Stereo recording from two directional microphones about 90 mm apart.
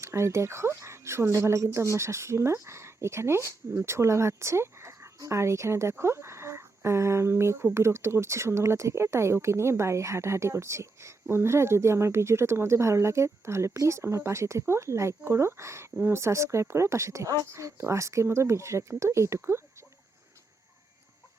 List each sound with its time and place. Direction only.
0.0 s speech: 30° right (ahead or behind)